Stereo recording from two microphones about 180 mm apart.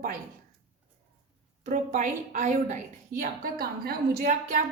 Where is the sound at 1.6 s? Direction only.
50° right (ahead or behind).